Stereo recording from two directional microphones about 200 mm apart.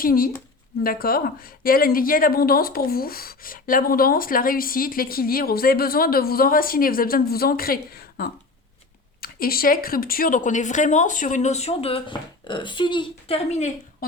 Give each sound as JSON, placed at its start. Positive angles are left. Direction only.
{"t": 0.0, "sound": "speech", "side_deg": 45}